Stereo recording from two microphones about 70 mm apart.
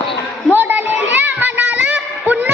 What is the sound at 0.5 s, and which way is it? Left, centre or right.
Children playing, right.